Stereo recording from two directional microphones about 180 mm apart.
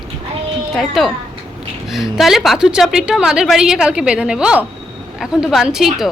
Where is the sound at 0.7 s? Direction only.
Centre (ahead or behind).